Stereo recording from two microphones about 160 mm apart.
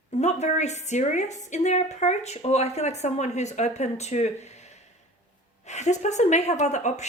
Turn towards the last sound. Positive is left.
turn(degrees=45)  # may be behind; listen again after turning